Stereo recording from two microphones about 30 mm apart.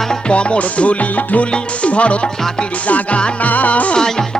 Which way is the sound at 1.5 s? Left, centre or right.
Left.